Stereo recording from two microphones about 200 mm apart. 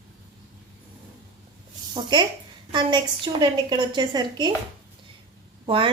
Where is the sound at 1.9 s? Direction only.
20° right (ahead or behind).